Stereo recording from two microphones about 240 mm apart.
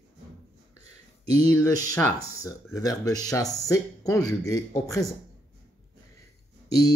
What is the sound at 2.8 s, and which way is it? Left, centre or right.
Speech, centre.